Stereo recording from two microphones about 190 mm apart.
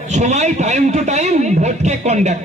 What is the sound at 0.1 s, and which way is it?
A man's voice, 40° right (ahead or behind).